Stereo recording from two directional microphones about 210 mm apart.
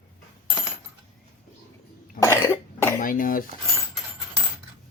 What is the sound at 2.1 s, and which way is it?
Cough, 15° left (ahead or behind).